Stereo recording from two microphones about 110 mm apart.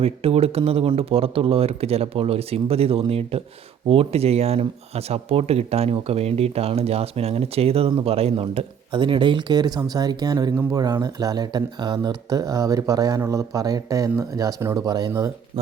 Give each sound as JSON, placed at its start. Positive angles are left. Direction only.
{"t": 0.0, "sound": "speech", "side_deg": -60}
{"t": 7.9, "sound": "speech", "side_deg": -45}
{"t": 8.1, "sound": "speech", "side_deg": -65}
{"t": 8.9, "sound": "speech", "side_deg": -50}